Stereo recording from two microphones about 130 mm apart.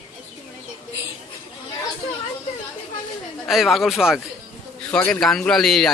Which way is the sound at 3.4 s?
Centre (ahead or behind).